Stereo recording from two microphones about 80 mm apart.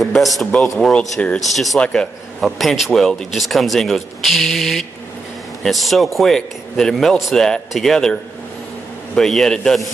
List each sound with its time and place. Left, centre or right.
0.0 s a man's voice: centre
1.2 s a man's voice: centre
1.5 s a man's voice: centre
1.8 s a man's voice: centre
2.4 s a man's voice: centre